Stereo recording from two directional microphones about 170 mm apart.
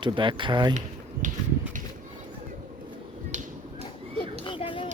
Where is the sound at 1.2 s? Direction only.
45° right (ahead or behind).